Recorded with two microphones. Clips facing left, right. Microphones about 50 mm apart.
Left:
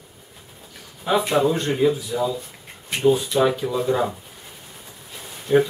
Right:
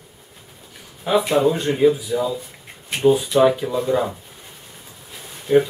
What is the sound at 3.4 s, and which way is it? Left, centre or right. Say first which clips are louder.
Speech: right 5 dB; centre.